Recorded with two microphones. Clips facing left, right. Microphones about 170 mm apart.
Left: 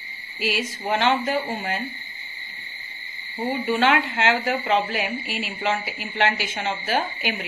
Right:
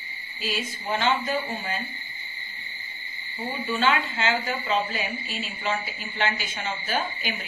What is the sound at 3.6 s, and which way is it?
Speech, 65° left (ahead or behind).